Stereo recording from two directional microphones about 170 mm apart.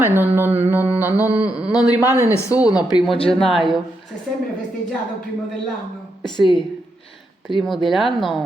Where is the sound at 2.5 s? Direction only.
10° right (ahead or behind).